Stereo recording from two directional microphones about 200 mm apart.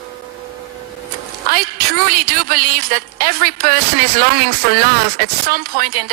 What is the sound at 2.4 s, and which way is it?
Speech, 45° right (ahead or behind).